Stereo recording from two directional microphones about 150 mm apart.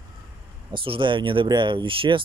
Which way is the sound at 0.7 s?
35° right (ahead or behind).